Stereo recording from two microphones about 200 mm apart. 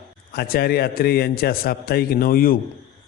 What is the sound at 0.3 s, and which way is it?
Speech, 50° left (ahead or behind).